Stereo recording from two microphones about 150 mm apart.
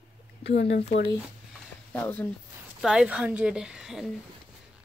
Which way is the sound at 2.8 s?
5° right (ahead or behind).